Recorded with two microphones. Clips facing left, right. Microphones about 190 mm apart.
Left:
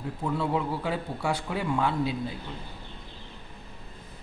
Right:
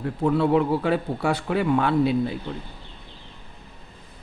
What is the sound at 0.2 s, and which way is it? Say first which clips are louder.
A man's voice: right 9 dB; 65° right (ahead or behind).